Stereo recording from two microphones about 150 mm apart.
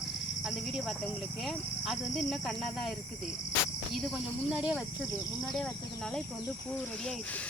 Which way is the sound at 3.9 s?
Centre (ahead or behind).